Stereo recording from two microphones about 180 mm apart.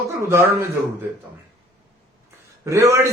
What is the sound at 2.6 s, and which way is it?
Speech, 15° right (ahead or behind).